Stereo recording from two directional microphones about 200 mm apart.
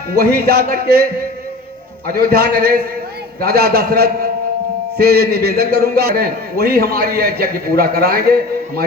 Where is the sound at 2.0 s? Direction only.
50° right (ahead or behind).